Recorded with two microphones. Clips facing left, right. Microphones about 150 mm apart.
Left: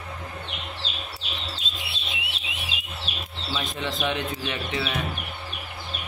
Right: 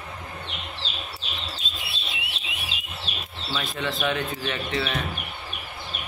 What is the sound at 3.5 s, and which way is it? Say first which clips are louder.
Speech: right 1 dB; 20° left (ahead or behind).